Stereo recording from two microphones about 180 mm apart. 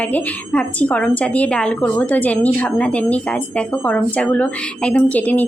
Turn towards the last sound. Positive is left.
turn(degrees=10)  # may be behind; listen again after turning